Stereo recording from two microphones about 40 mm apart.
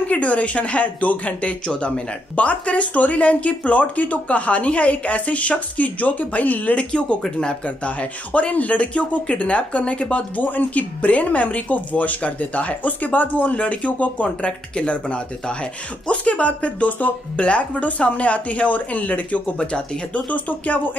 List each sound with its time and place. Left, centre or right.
0.0 s speech: left
6.8 s speech: left
7.2 s speech: centre
7.6 s speech: left
10.3 s speech: left
19.6 s speech: left
20.2 s speech: left